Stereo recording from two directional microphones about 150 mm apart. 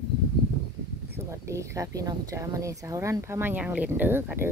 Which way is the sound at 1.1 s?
20° right (ahead or behind).